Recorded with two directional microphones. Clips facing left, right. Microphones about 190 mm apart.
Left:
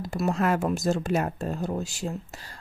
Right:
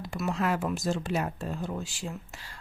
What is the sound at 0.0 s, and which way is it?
Speech, 40° left (ahead or behind).